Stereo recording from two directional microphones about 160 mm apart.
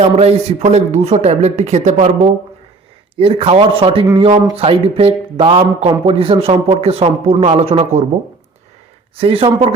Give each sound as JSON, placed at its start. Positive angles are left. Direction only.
{"t": 0.0, "sound": "speech", "side_deg": -40}
{"t": 3.2, "sound": "speech", "side_deg": -35}
{"t": 9.1, "sound": "speech", "side_deg": -35}